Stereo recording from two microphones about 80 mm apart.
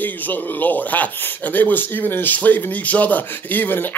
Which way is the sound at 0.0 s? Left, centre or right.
Left.